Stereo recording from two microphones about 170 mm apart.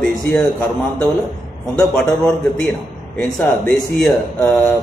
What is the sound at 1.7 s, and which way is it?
A man's voice, 5° left (ahead or behind).